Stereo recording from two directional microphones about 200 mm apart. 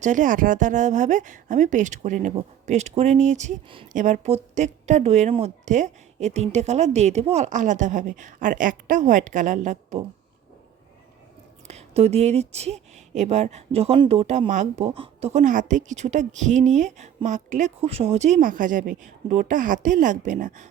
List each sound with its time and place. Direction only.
0.0 s a woman's voice: 40° right (ahead or behind)
11.7 s a woman's voice: 30° right (ahead or behind)